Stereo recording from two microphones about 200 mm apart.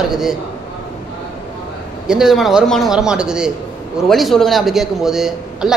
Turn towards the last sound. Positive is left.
turn(degrees=0)  # may be behind; listen again after turning